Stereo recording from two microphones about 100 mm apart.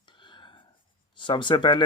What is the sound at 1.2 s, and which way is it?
Speech, 55° left (ahead or behind).